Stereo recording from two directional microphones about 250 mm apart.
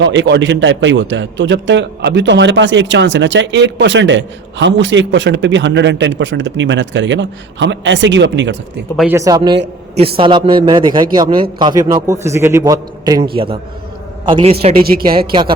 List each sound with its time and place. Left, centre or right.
0.0 s a man's voice: right
9.0 s a man's voice: centre; by 15.0 s right
15.3 s a man's voice: centre